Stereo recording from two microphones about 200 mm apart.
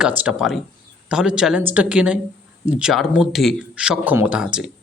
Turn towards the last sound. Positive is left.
turn(degrees=-5)  # may be behind; listen again after turning